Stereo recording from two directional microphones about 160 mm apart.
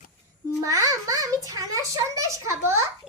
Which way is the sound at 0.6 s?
20° right (ahead or behind).